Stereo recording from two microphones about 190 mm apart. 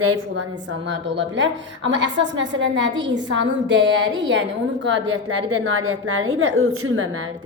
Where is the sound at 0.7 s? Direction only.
75° right (ahead or behind).